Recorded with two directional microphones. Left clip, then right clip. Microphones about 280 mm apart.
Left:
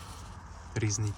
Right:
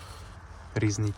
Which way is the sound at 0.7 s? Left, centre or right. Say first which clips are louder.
Right 5 dB; centre.